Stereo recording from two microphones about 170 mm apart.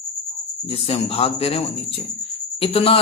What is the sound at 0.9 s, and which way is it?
A man's voice, 35° left (ahead or behind).